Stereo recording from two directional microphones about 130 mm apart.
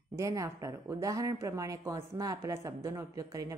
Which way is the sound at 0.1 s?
25° right (ahead or behind).